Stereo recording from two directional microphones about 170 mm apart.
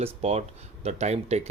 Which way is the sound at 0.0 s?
35° right (ahead or behind).